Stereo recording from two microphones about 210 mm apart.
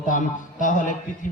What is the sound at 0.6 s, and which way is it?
Speech, 40° left (ahead or behind).